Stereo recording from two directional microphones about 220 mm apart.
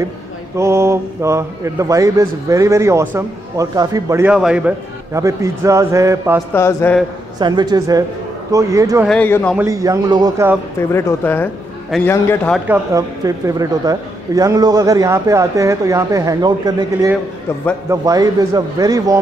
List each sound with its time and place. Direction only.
0.6 s a man's voice: 10° right (ahead or behind)
6.5 s a man's voice: 10° left (ahead or behind)
7.3 s a man's voice: 20° right (ahead or behind)
9.0 s a man's voice: 5° left (ahead or behind)
9.6 s a man's voice: 15° right (ahead or behind)
10.8 s a man's voice: 10° left (ahead or behind)
12.5 s a man's voice: 10° right (ahead or behind)